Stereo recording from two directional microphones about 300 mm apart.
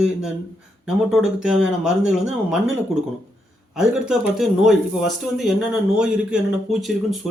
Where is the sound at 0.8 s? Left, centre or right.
Centre.